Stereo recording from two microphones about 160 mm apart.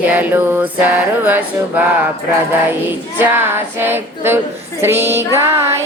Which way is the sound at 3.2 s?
15° right (ahead or behind).